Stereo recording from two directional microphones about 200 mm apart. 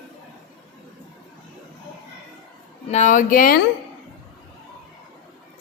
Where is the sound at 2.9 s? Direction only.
35° left (ahead or behind).